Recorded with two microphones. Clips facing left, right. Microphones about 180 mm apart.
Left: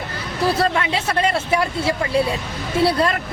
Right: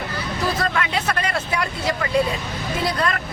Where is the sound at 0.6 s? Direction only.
25° left (ahead or behind).